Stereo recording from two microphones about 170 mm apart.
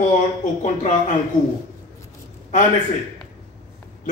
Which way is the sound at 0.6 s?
45° left (ahead or behind).